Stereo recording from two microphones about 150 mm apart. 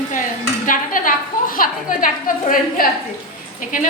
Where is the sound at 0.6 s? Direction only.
65° left (ahead or behind).